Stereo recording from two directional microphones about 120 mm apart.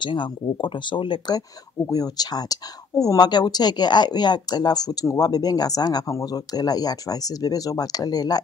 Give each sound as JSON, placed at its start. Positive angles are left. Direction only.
{"t": 0.0, "sound": "speech", "side_deg": 40}